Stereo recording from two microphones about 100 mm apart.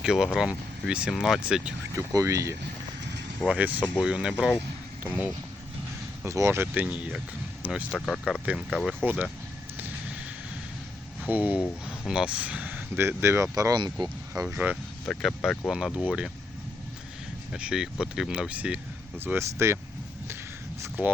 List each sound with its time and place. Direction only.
0.0 s speech: 5° right (ahead or behind)
2.1 s speech: 30° right (ahead or behind)
3.5 s speech: 15° right (ahead or behind)
6.2 s speech: 30° right (ahead or behind)
6.8 s speech: 15° right (ahead or behind)
7.9 s speech: 10° left (ahead or behind)
8.3 s speech: 5° right (ahead or behind)
11.2 s speech: 15° right (ahead or behind); by 14.4 s 45° right (ahead or behind)
14.4 s speech: 15° right (ahead or behind)
15.0 s speech: 10° left (ahead or behind); by 16.3 s 10° right (ahead or behind)
17.5 s speech: 5° right (ahead or behind)
19.2 s speech: 25° right (ahead or behind)
21.0 s speech: 20° right (ahead or behind)